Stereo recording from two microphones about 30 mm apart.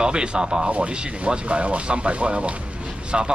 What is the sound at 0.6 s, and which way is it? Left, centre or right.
Speech, right.